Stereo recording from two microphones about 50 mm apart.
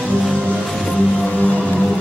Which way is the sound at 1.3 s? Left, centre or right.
Left.